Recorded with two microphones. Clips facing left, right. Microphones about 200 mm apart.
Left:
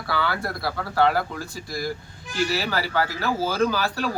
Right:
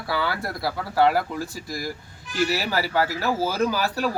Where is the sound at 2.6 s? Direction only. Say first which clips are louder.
Right 1 dB; 15° right (ahead or behind).